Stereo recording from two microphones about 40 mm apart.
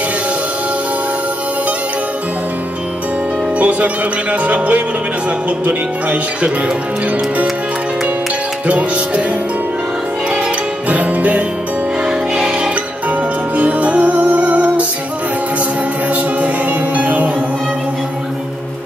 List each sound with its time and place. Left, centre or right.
3.5 s music: right
8.6 s music: right
10.9 s music: right
12.1 s music: centre
13.1 s music: right
16.1 s music: right